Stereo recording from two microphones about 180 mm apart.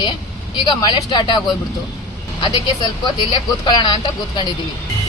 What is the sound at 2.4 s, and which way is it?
Speech, 25° left (ahead or behind).